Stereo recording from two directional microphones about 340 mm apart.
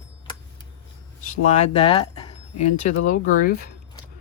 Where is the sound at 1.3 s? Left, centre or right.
Centre.